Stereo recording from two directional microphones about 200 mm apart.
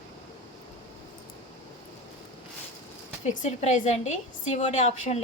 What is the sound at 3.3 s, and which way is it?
A woman's voice, 35° left (ahead or behind).